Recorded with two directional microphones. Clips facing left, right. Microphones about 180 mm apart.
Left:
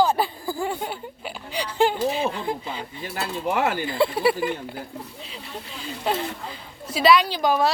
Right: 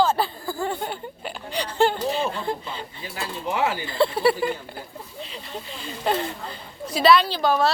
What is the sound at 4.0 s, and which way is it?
Speech, 10° left (ahead or behind).